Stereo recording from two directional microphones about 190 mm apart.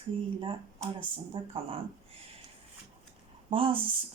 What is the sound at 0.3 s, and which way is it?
Speech, 25° right (ahead or behind).